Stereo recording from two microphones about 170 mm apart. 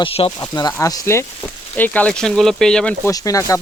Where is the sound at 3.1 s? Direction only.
20° left (ahead or behind).